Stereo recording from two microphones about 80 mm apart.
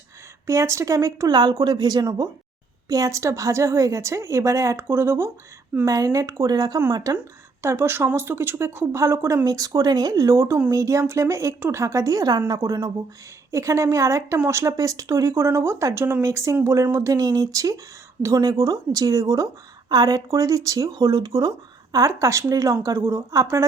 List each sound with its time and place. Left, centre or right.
0.4 s speech: right
1.3 s a woman's voice: right
5.8 s a woman's voice: right
7.6 s speech: right
9.4 s speech: right
10.3 s speech: right
21.9 s speech: right